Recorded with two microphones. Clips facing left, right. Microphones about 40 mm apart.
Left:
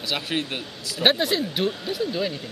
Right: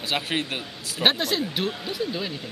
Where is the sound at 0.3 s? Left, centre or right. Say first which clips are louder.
Even; centre.